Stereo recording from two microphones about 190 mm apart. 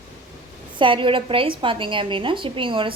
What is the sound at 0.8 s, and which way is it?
A woman's voice, 25° right (ahead or behind).